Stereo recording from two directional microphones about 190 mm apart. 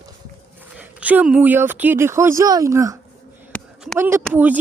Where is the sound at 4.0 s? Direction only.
15° right (ahead or behind).